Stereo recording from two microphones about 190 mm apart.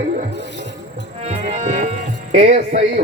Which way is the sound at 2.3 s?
35° right (ahead or behind).